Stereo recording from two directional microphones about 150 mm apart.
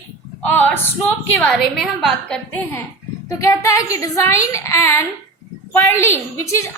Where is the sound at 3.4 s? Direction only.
20° left (ahead or behind).